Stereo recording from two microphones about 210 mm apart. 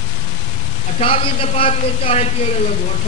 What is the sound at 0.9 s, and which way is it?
A woman's voice, 25° left (ahead or behind).